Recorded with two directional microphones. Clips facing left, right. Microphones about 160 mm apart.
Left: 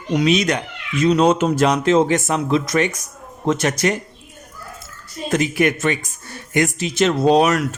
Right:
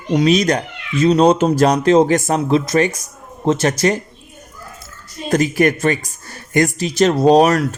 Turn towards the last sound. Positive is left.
turn(degrees=-40)  # may be behind; listen again after turning